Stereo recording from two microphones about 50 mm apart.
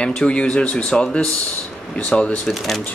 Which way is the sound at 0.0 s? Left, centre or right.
Centre.